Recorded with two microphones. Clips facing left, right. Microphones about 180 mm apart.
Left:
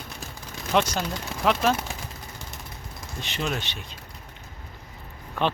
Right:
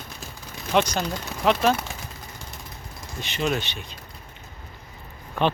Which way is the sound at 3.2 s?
Centre (ahead or behind).